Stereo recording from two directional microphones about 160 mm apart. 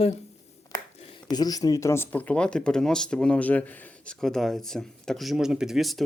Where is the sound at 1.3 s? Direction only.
25° left (ahead or behind).